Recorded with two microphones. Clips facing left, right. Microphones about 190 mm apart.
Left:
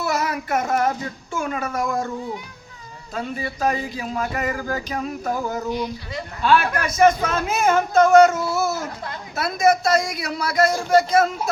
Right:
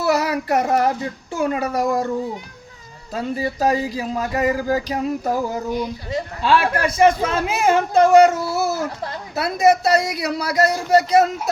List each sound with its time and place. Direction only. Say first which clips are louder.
0.0 s a man's voice: right 5 dB; 35° right (ahead or behind)